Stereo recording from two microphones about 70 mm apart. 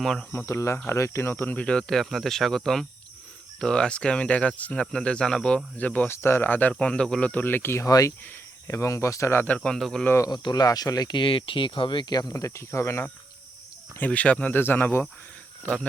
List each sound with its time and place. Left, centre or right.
0.0 s speech: centre
0.3 s speech: left
1.6 s speech: centre
5.7 s speech: left
6.1 s speech: left
7.9 s speech: left
9.6 s speech: centre
10.2 s speech: left
11.9 s speech: left
12.3 s speech: left
14.0 s speech: centre
14.5 s speech: left